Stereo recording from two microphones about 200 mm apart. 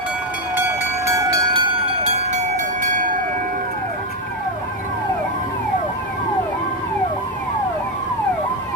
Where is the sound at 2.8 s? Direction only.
40° right (ahead or behind).